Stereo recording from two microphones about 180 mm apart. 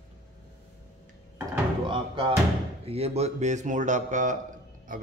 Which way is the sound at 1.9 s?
30° right (ahead or behind).